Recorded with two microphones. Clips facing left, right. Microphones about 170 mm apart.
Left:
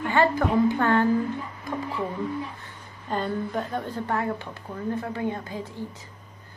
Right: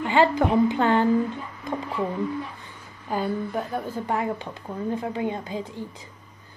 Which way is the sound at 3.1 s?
5° right (ahead or behind).